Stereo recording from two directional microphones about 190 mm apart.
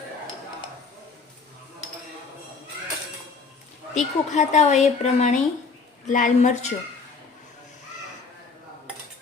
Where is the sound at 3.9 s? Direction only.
40° left (ahead or behind).